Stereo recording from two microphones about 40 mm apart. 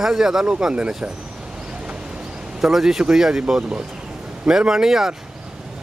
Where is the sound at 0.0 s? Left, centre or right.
Centre.